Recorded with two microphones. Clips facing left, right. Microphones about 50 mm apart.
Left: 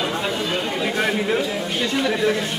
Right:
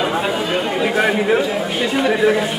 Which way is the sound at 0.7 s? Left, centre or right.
Centre.